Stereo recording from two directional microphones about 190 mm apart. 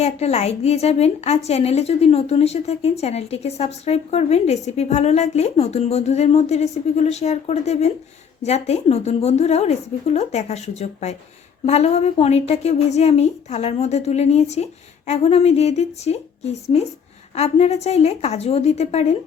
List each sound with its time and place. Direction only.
0.0 s a woman's voice: 35° left (ahead or behind)